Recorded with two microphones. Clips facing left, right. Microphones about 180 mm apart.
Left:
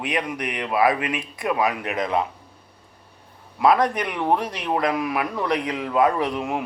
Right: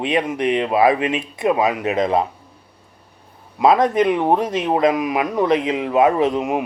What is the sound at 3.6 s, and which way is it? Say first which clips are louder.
Speech: right 4 dB; 20° right (ahead or behind).